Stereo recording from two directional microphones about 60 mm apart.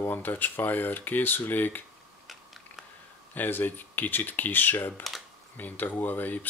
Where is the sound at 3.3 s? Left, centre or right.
Left.